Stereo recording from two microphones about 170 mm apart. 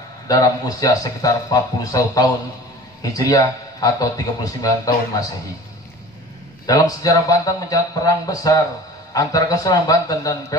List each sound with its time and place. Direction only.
0.3 s speech: 20° left (ahead or behind)
6.6 s speech: 20° left (ahead or behind)